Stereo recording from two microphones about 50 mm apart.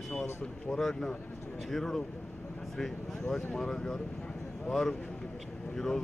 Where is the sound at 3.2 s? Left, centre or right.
Centre.